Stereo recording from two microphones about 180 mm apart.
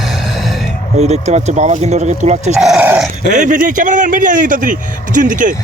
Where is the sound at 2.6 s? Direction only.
5° right (ahead or behind).